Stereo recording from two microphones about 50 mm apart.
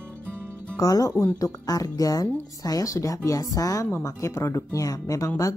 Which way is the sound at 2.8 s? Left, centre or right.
Left.